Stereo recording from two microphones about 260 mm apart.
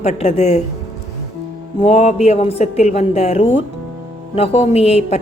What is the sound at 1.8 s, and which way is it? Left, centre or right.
A woman's voice, left.